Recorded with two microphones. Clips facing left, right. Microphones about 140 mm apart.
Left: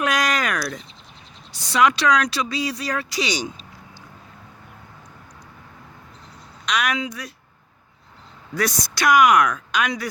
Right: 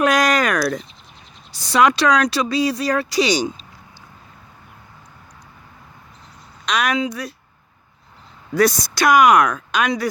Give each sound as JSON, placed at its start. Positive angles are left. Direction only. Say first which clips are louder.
{"t": 0.0, "sound": "a sound", "louder": "right 5 dB", "side_deg": -40}
{"t": 1.5, "sound": "speech", "louder": "right 3 dB", "side_deg": -35}
{"t": 6.7, "sound": "speech", "louder": "right 4 dB", "side_deg": -35}
{"t": 8.5, "sound": "speech", "louder": "right 7 dB", "side_deg": -35}